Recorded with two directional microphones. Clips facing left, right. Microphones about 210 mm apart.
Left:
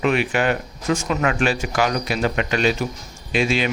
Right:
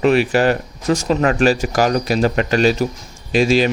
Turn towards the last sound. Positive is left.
turn(degrees=-40)  # may be behind; listen again after turning